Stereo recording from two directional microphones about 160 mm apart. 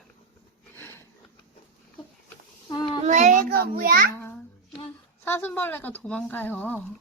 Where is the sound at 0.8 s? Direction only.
15° left (ahead or behind).